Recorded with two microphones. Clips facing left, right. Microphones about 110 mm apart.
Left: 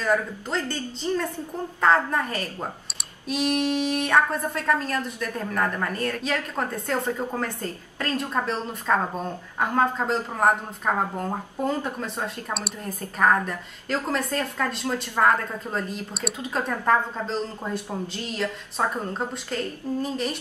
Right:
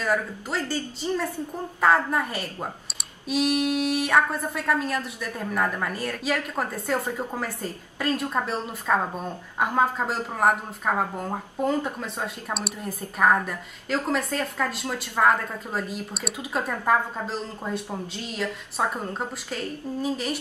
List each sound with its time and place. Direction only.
0.5 s a woman's voice: 10° right (ahead or behind)